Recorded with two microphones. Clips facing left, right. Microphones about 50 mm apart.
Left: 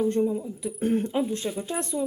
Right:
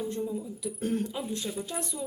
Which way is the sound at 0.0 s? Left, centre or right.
Left.